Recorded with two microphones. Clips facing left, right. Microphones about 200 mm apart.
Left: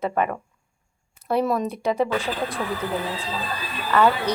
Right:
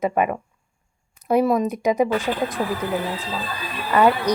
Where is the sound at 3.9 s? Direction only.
15° right (ahead or behind).